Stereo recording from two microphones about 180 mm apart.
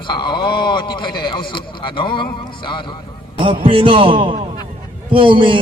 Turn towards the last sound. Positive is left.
turn(degrees=-25)  # may be behind; listen again after turning